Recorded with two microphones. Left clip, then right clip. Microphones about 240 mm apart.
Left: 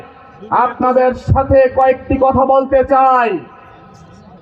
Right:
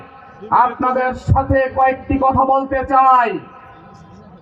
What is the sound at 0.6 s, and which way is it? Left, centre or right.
Speech, right.